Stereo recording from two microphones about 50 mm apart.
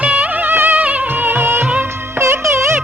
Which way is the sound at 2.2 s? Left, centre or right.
Right.